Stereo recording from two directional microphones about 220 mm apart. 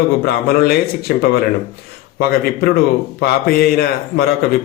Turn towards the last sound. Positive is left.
turn(degrees=45)  # may be behind; listen again after turning